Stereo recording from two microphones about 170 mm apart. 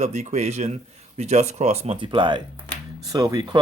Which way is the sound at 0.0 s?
40° right (ahead or behind).